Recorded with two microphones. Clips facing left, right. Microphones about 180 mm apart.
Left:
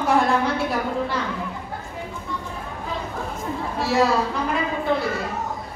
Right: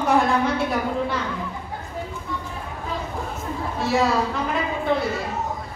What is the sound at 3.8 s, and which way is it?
Speech, centre (ahead or behind).